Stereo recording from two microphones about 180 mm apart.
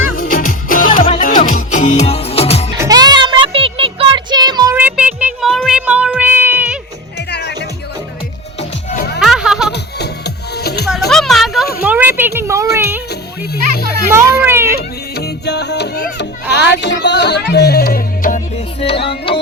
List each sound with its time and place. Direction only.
0.2 s music: 50° left (ahead or behind); by 2.6 s 35° left (ahead or behind)
2.7 s music: 20° right (ahead or behind)
4.8 s music: 5° right (ahead or behind)
7.3 s music: 70° left (ahead or behind)
8.5 s music: 40° left (ahead or behind)
9.2 s music: 5° right (ahead or behind)
9.7 s music: 65° left (ahead or behind)
11.1 s music: centre (ahead or behind)
11.8 s a sound: 10° right (ahead or behind)
12.7 s music: 15° right (ahead or behind)
13.1 s music: 65° left (ahead or behind)
14.1 s children playing: 15° right (ahead or behind)
14.8 s music: 65° left (ahead or behind)
18.8 s music: 30° left (ahead or behind)